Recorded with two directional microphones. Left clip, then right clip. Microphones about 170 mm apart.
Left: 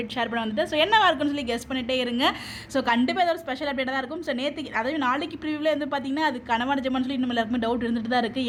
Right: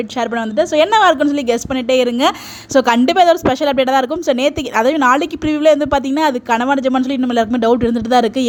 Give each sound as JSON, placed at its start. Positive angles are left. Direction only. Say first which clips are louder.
{"t": 0.2, "sound": "a woman's voice", "louder": "right 10 dB", "side_deg": -40}